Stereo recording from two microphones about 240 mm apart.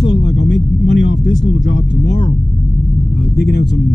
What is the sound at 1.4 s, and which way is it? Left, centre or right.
Speech, left.